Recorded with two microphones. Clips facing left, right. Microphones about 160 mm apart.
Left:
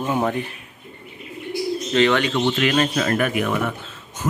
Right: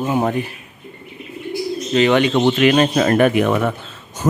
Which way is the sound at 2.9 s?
35° right (ahead or behind).